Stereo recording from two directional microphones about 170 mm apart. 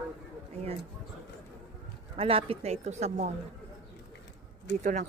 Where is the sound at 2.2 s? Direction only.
35° right (ahead or behind).